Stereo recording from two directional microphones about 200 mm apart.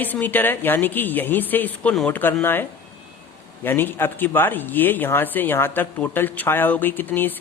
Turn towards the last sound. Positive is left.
turn(degrees=10)  # may be behind; listen again after turning